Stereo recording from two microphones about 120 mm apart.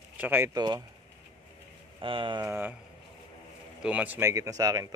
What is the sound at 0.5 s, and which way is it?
Speech, 35° right (ahead or behind).